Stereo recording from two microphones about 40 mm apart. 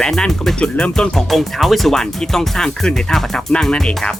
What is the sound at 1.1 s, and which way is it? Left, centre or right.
Speech, centre.